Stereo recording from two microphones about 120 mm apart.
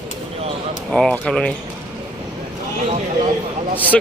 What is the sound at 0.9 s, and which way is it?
Speech, 5° left (ahead or behind).